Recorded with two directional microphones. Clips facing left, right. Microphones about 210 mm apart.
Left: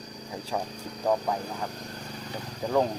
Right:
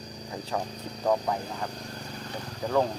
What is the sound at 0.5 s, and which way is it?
Speech, 10° left (ahead or behind).